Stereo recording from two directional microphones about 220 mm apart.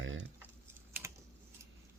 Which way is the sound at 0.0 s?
60° right (ahead or behind).